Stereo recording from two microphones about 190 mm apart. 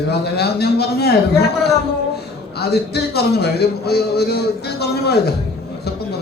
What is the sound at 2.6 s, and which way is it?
A man's voice, 55° left (ahead or behind).